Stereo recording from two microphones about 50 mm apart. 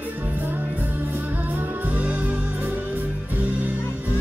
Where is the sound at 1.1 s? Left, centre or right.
Right.